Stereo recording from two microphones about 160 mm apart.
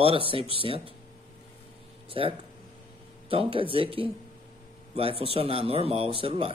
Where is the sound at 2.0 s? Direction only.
35° right (ahead or behind).